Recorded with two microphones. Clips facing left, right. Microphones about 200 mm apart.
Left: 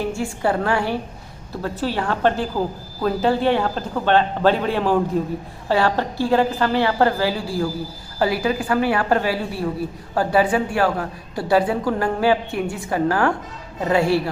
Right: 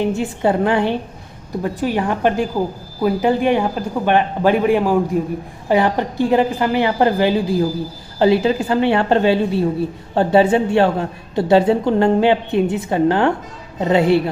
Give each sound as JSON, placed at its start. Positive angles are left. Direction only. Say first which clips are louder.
{"t": 0.0, "sound": "a woman's voice", "louder": "right 5 dB", "side_deg": -20}